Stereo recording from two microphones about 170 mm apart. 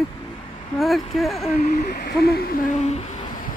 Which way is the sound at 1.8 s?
65° left (ahead or behind).